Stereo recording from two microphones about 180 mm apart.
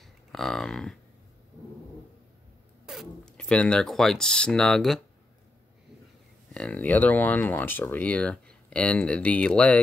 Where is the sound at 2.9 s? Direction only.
Centre (ahead or behind).